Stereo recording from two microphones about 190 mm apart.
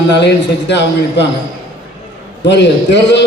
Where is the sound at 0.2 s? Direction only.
65° left (ahead or behind).